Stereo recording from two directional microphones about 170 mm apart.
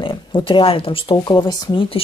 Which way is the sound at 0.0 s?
30° left (ahead or behind).